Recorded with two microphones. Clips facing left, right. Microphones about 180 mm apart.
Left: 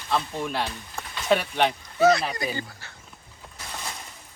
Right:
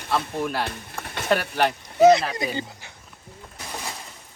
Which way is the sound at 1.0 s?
60° right (ahead or behind).